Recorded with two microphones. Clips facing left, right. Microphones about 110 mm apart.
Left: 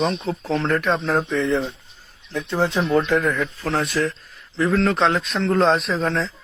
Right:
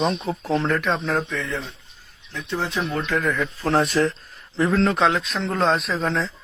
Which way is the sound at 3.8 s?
25° right (ahead or behind).